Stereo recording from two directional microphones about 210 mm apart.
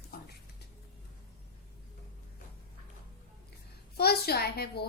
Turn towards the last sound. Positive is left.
turn(degrees=50)  # may be behind; listen again after turning